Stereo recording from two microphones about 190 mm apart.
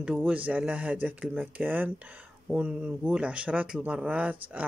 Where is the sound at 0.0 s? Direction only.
5° right (ahead or behind).